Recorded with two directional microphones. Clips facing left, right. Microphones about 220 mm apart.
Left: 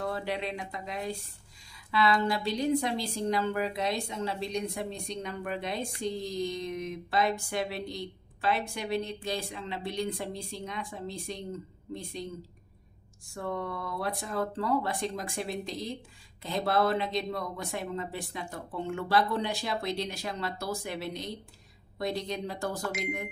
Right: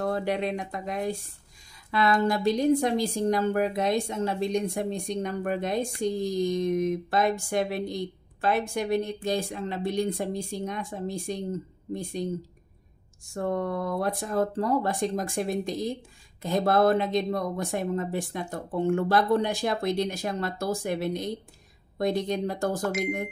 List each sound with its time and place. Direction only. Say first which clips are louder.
0.0 s a woman's voice: right 6 dB; 50° right (ahead or behind)
13.3 s a woman's voice: right 6 dB; 45° right (ahead or behind)